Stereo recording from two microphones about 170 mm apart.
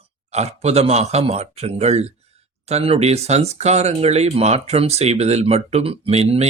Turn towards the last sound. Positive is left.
turn(degrees=-40)  # may be behind; listen again after turning